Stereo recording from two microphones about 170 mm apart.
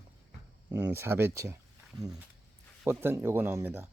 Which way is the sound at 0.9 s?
15° right (ahead or behind).